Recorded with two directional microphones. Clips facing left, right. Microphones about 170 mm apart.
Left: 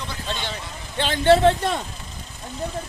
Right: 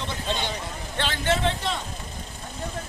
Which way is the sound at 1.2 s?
50° left (ahead or behind).